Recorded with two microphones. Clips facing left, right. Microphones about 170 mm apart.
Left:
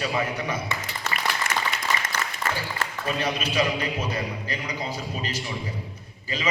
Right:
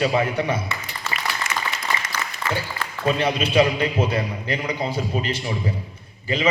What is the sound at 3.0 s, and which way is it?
Speech, 30° right (ahead or behind).